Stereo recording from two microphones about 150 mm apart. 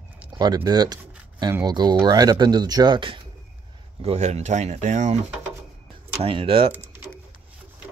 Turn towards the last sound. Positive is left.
turn(degrees=-15)  # may be behind; listen again after turning